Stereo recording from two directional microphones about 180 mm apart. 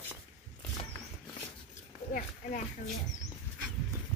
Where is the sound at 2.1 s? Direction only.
50° left (ahead or behind).